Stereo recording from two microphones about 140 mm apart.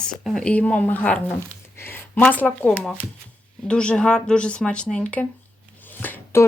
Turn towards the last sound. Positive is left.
turn(degrees=15)  # may be behind; listen again after turning